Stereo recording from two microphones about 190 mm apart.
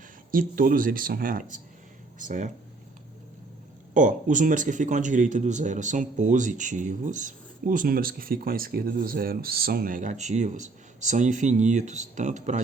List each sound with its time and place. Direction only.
0.3 s speech: 50° right (ahead or behind)
3.9 s speech: 40° right (ahead or behind)